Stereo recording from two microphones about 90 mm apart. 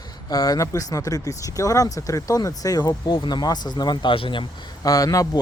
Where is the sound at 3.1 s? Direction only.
60° left (ahead or behind).